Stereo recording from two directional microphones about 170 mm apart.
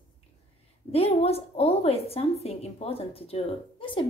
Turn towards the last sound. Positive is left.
turn(degrees=30)  # may be behind; listen again after turning